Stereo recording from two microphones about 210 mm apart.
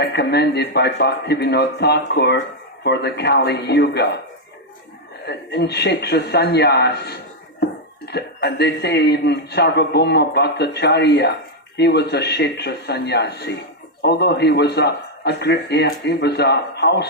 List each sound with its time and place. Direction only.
0.0 s speech: 50° left (ahead or behind)
5.2 s speech: 50° left (ahead or behind)